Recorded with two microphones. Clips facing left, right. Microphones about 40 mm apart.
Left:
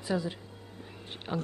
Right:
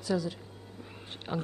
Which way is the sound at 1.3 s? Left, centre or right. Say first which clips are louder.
Even; centre.